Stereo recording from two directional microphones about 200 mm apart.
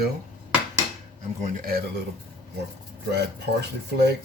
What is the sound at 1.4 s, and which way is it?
Speech, 45° right (ahead or behind).